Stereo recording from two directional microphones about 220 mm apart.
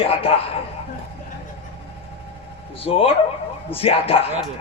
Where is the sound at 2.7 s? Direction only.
25° left (ahead or behind).